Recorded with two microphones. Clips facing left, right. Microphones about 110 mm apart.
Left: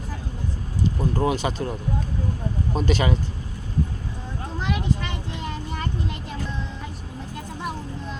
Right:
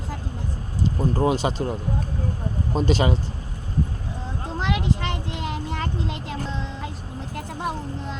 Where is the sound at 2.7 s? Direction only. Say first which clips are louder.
Right 2 dB; 30° right (ahead or behind).